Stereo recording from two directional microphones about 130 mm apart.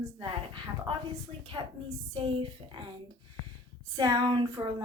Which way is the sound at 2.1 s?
45° right (ahead or behind).